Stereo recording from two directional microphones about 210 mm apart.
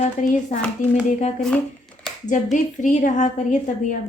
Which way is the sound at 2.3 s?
35° left (ahead or behind).